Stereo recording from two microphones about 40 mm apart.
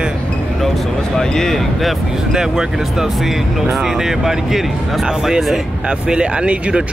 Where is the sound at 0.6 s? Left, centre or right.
Centre.